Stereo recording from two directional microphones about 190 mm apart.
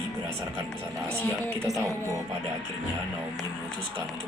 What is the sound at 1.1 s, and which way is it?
Speech, 5° left (ahead or behind).